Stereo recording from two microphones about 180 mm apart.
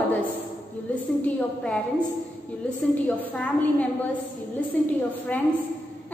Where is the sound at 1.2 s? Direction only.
5° left (ahead or behind).